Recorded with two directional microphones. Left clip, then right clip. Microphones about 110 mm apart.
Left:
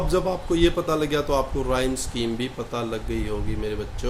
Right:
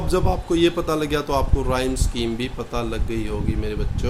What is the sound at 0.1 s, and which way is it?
A man's voice, 40° right (ahead or behind).